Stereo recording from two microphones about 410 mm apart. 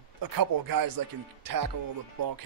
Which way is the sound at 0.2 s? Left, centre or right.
Right.